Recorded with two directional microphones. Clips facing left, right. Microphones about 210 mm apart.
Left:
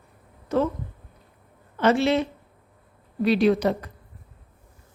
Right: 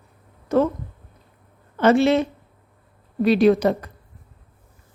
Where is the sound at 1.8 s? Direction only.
50° right (ahead or behind).